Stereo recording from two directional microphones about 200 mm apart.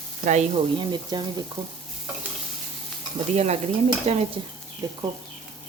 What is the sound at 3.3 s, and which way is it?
Stir, 35° right (ahead or behind).